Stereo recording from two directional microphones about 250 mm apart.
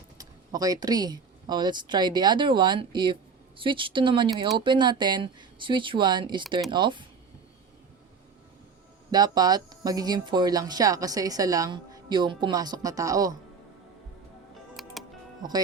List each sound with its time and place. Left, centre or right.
0.2 s speech: centre
9.1 s speech: centre
14.8 s music: centre